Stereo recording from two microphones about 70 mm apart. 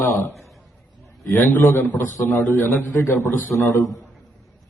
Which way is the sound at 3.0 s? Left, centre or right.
Left.